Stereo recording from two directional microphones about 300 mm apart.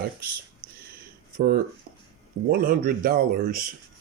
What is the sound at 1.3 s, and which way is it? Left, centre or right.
Speech, right.